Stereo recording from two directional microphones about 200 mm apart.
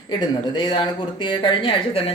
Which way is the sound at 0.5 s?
25° left (ahead or behind).